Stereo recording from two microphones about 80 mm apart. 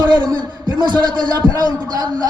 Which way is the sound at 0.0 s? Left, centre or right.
Right.